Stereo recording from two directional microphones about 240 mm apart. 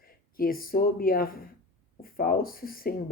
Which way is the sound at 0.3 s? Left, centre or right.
Left.